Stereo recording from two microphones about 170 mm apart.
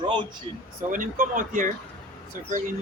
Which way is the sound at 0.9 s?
50° right (ahead or behind).